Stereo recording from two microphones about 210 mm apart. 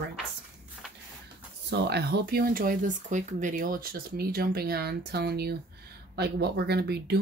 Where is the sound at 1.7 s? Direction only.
50° right (ahead or behind).